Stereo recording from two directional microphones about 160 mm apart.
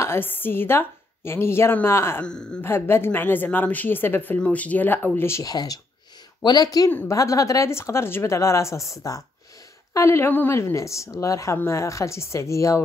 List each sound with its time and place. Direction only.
0.0 s a woman's voice: 15° left (ahead or behind)